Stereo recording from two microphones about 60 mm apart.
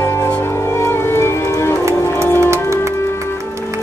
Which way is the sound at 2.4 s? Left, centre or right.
Right.